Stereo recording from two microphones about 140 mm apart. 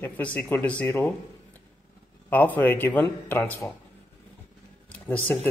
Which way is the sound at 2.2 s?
15° left (ahead or behind).